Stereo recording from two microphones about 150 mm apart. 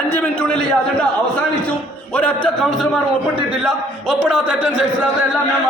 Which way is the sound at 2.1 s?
10° left (ahead or behind).